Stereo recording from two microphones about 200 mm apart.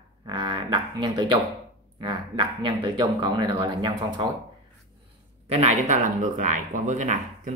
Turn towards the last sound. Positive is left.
turn(degrees=-40)  # may be behind; listen again after turning